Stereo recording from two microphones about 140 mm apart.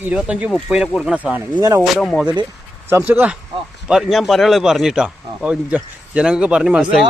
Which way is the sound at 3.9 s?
Centre (ahead or behind).